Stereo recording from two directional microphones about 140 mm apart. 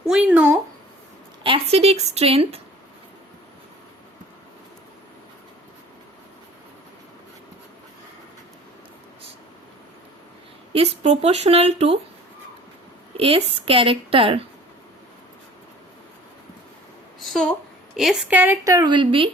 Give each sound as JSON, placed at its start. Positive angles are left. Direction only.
{"t": 0.1, "sound": "speech", "side_deg": -5}
{"t": 1.5, "sound": "speech", "side_deg": -45}
{"t": 10.7, "sound": "speech", "side_deg": -45}
{"t": 13.1, "sound": "speech", "side_deg": -45}
{"t": 17.2, "sound": "a sound", "side_deg": 5}
{"t": 17.9, "sound": "a woman's voice", "side_deg": -5}
{"t": 18.6, "sound": "a woman's voice", "side_deg": -25}